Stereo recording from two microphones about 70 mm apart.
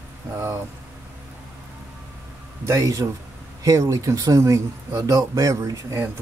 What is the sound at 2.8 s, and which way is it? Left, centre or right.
Speech, right.